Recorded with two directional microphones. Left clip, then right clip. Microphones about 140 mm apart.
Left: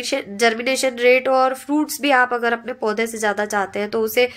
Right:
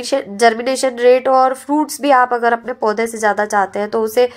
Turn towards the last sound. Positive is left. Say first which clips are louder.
# right 4 dB
turn(degrees=0)  # may be behind; listen again after turning